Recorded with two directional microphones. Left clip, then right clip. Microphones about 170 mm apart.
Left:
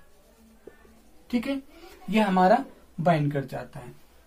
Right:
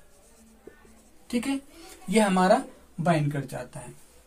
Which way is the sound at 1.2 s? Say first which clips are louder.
Even; 20° right (ahead or behind).